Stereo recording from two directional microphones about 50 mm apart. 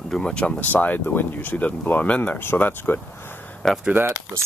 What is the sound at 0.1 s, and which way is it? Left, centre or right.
Speech, centre.